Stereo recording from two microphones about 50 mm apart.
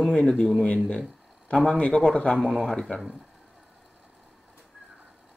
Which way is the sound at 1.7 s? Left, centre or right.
Left.